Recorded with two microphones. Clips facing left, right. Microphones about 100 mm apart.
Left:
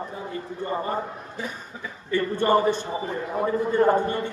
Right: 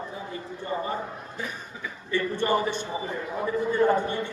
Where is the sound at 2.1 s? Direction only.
45° left (ahead or behind).